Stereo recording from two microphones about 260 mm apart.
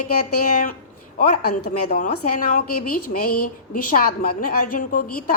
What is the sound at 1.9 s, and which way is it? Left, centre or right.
Speech, left.